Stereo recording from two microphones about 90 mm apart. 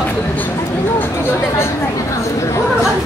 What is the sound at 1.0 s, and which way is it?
Speech, 25° left (ahead or behind).